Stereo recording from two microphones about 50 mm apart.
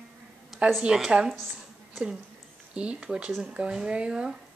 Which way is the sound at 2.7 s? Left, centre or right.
Right.